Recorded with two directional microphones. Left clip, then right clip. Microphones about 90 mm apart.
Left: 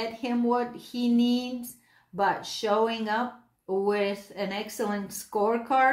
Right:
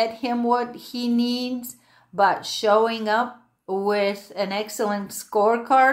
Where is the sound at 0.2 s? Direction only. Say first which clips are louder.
Right 5 dB; 35° right (ahead or behind).